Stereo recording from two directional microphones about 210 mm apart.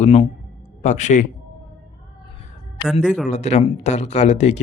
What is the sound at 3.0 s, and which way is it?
Speech, 5° left (ahead or behind).